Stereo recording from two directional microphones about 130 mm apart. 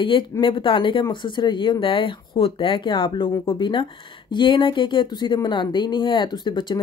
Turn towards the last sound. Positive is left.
turn(degrees=35)  # may be behind; listen again after turning